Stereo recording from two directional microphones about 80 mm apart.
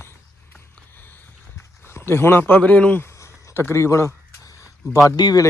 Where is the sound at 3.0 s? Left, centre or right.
Left.